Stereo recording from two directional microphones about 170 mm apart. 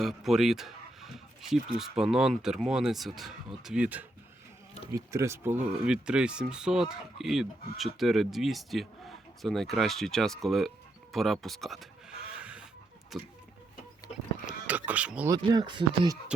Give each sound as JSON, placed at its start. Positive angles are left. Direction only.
{"t": 0.0, "sound": "speech", "side_deg": 0}
{"t": 12.4, "sound": "chicken", "side_deg": -5}
{"t": 13.1, "sound": "speech", "side_deg": 0}
{"t": 14.4, "sound": "speech", "side_deg": -10}
{"t": 15.3, "sound": "speech", "side_deg": -25}